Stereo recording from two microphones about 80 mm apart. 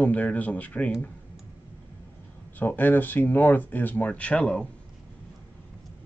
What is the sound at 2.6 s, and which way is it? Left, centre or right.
Speech, left.